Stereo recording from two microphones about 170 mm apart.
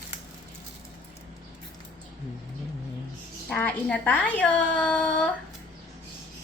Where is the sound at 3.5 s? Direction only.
10° left (ahead or behind).